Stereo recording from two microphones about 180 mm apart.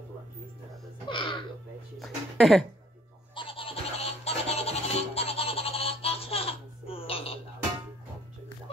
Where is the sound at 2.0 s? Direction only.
Centre (ahead or behind).